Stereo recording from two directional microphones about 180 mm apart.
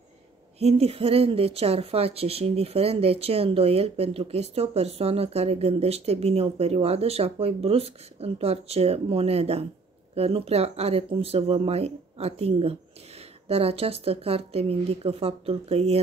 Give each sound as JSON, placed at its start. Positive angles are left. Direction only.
{"t": 0.6, "sound": "speech", "side_deg": -35}